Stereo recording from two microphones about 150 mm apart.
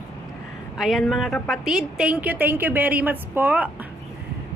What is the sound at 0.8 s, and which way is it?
A woman's voice, centre (ahead or behind).